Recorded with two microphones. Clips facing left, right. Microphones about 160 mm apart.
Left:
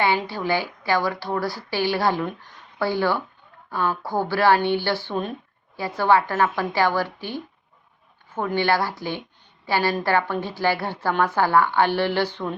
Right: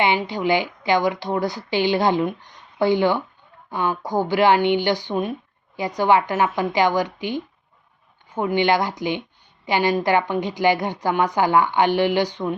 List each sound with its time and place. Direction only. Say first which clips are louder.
0.0 s a woman's voice: right 2 dB; 20° right (ahead or behind)